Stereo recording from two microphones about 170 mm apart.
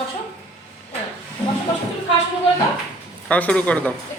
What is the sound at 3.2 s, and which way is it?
Speech, 5° left (ahead or behind).